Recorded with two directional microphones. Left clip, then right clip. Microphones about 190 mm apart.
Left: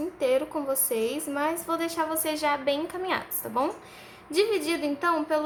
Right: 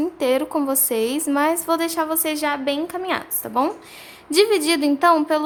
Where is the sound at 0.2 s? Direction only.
40° right (ahead or behind).